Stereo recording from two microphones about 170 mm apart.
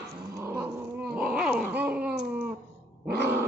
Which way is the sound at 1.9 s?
10° right (ahead or behind).